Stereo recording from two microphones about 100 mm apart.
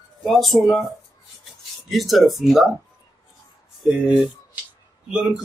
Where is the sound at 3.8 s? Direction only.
10° right (ahead or behind).